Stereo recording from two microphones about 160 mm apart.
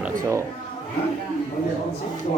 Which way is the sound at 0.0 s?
20° right (ahead or behind).